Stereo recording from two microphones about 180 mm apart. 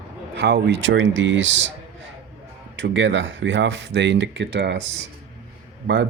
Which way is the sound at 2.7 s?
90° right.